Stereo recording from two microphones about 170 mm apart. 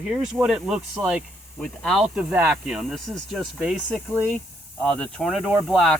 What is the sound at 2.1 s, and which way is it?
Speech, 10° right (ahead or behind).